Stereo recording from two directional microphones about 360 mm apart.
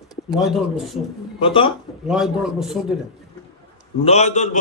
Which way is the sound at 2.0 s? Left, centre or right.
Centre.